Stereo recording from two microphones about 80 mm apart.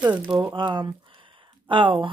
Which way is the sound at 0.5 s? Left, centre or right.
Right.